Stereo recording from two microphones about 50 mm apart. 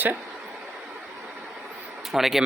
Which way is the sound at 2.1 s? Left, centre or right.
Centre.